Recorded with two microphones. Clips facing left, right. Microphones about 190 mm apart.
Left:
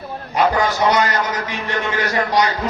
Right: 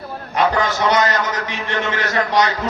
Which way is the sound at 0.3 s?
10° left (ahead or behind).